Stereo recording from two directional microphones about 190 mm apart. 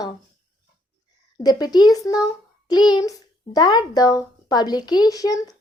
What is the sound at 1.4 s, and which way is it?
A child's voice, 20° left (ahead or behind).